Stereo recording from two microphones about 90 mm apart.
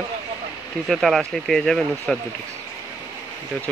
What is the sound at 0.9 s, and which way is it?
Speech, centre (ahead or behind).